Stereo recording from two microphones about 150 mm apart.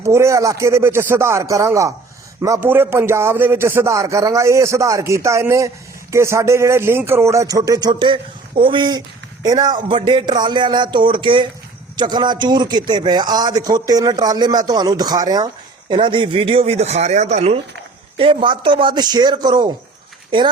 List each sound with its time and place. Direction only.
0.0 s a man's voice: 20° right (ahead or behind); by 17.6 s 45° right (ahead or behind)
18.2 s speech: 35° right (ahead or behind)